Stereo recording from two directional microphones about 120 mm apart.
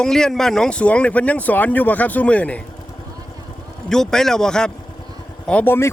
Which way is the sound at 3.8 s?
5° left (ahead or behind).